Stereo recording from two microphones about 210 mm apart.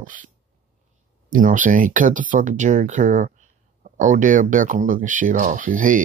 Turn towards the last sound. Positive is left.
turn(degrees=-40)  # may be behind; listen again after turning